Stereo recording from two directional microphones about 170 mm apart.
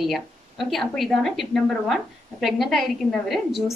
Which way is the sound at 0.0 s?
Centre (ahead or behind).